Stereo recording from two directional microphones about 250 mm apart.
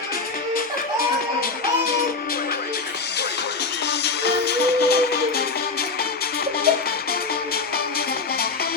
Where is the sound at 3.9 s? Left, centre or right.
Left.